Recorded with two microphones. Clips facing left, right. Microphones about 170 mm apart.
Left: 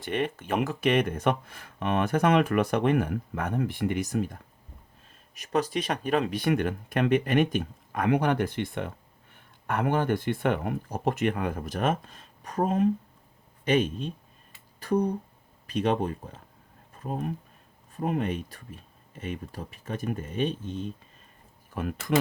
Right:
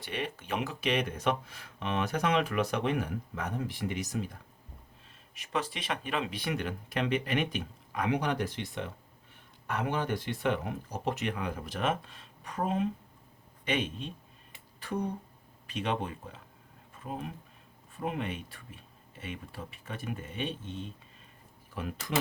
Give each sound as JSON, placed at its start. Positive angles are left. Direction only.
{"t": 0.0, "sound": "speech", "side_deg": 50}